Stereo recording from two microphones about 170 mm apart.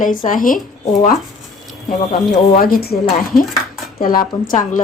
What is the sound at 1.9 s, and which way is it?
Speech, 50° left (ahead or behind).